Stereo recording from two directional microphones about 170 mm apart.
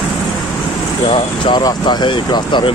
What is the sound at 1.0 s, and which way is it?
Speech, 30° left (ahead or behind).